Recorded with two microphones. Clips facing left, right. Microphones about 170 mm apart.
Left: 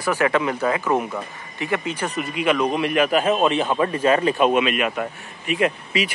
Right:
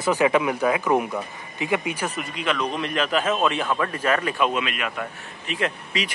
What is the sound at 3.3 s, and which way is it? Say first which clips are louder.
Speech: left 4 dB; 25° left (ahead or behind).